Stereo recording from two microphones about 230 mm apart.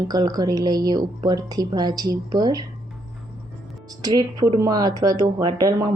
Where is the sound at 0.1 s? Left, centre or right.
Centre.